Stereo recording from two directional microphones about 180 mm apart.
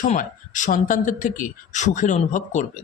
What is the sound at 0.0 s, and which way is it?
A man's voice, 45° left (ahead or behind).